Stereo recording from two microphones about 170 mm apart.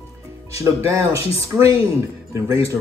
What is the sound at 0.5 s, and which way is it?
Speech, 20° right (ahead or behind).